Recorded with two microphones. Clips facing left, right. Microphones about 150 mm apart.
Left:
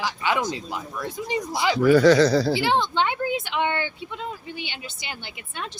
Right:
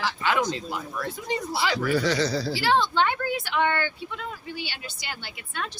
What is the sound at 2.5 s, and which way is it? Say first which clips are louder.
Speech: left 1 dB; 20° left (ahead or behind).